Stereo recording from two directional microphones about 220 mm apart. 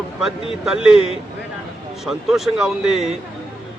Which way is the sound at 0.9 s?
25° left (ahead or behind).